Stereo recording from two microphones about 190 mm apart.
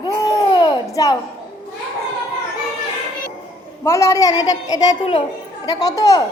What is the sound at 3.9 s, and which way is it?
A woman's voice, 15° left (ahead or behind).